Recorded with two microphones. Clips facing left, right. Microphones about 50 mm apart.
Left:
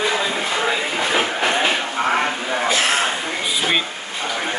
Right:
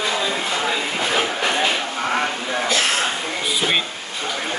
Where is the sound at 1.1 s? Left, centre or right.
Centre.